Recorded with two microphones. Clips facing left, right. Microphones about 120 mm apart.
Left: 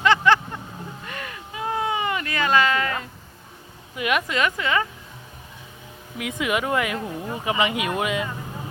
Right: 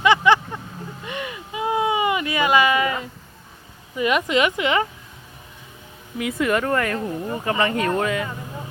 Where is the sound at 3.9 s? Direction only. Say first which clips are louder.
Right 3 dB; centre (ahead or behind).